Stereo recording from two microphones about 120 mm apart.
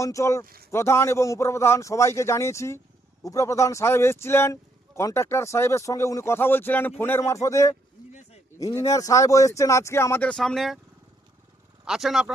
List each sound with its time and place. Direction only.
0.0 s a man's voice: 25° left (ahead or behind); by 10.8 s centre (ahead or behind)
11.9 s speech: 5° right (ahead or behind)